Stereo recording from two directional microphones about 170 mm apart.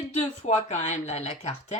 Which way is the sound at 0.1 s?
45° left (ahead or behind).